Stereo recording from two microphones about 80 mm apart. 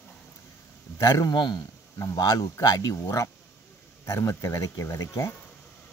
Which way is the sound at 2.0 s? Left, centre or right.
Left.